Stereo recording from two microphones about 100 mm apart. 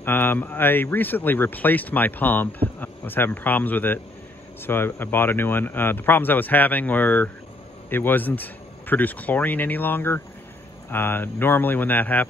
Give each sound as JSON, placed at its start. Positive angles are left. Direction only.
{"t": 0.0, "sound": "speech", "side_deg": 20}